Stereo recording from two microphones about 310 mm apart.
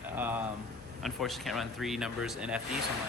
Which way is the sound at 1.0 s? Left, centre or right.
Centre.